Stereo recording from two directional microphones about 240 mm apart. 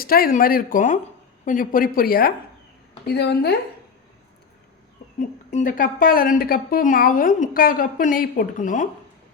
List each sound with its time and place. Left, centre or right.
0.0 s a woman's voice: left
5.5 s a woman's voice: left